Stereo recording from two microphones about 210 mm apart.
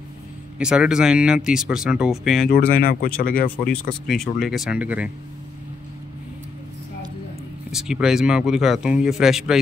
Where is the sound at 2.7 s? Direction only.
45° left (ahead or behind).